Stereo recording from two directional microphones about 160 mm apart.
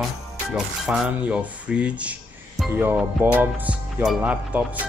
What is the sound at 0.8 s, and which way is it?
Speech, 5° right (ahead or behind).